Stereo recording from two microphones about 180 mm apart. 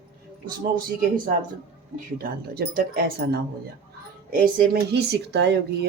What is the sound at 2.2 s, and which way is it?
Speech, 55° right (ahead or behind).